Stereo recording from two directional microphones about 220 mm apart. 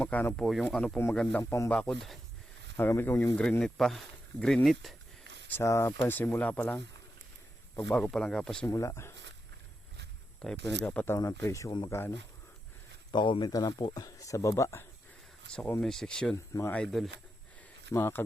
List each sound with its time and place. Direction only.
0.0 s speech: 5° left (ahead or behind)
5.2 s a sound: 55° right (ahead or behind)
5.5 s speech: 10° left (ahead or behind)
10.6 s speech: 50° right (ahead or behind)
10.8 s speech: 10° left (ahead or behind)